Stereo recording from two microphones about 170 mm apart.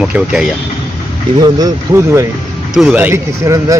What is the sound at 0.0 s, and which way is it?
Speech, 5° right (ahead or behind).